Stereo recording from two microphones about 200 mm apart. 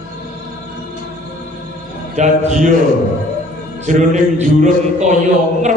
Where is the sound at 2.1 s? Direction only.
35° right (ahead or behind).